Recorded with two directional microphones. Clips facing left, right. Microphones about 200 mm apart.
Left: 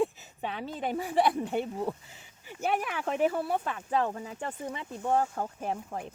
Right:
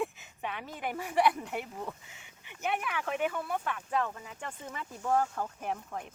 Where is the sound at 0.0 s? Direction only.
30° left (ahead or behind).